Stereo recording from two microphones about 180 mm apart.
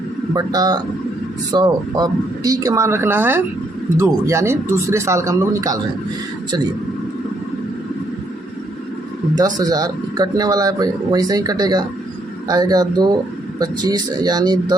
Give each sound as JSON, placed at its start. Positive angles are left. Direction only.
{"t": 0.3, "sound": "speech", "side_deg": -20}
{"t": 9.6, "sound": "speech", "side_deg": -20}